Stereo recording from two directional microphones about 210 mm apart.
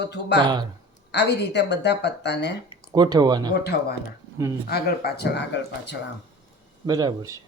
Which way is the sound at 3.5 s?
50° left (ahead or behind).